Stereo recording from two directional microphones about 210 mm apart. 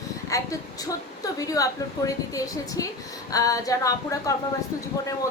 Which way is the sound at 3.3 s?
15° left (ahead or behind).